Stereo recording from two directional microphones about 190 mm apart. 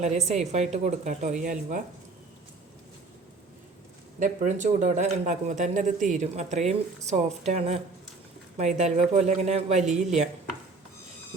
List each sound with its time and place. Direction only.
0.0 s speech: 35° right (ahead or behind)
4.2 s speech: 40° right (ahead or behind)